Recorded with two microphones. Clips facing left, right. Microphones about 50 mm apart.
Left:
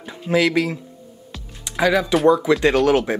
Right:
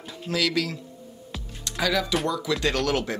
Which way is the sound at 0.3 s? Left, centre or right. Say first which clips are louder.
Left 8 dB; left.